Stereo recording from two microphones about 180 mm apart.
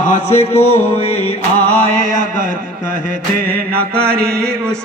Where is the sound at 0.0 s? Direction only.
40° left (ahead or behind).